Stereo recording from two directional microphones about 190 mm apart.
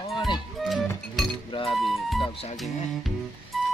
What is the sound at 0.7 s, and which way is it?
Music, centre (ahead or behind).